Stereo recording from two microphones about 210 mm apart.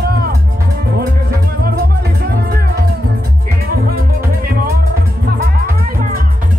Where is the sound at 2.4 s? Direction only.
50° right (ahead or behind).